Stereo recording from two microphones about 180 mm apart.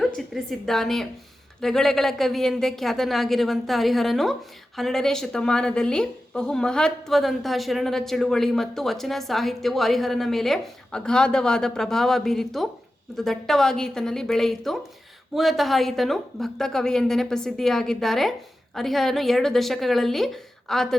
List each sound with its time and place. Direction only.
0.0 s a woman's voice: centre (ahead or behind)